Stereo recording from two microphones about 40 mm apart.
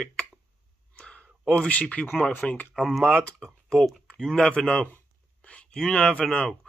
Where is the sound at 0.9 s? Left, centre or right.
Left.